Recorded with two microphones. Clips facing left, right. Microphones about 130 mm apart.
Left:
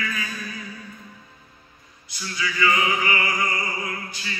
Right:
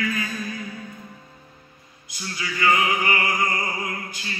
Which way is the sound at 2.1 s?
45° right (ahead or behind).